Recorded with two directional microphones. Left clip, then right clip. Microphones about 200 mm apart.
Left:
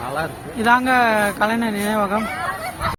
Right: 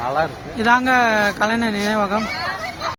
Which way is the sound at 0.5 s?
Centre (ahead or behind).